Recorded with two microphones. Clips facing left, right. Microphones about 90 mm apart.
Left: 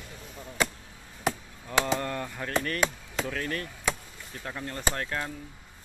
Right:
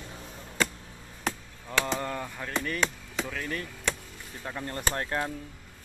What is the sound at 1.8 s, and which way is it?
Speech, 5° right (ahead or behind).